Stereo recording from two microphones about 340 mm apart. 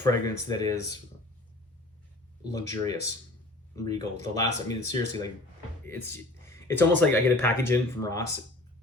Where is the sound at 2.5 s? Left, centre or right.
Centre.